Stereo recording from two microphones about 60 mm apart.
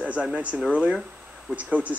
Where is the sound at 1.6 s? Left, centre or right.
Right.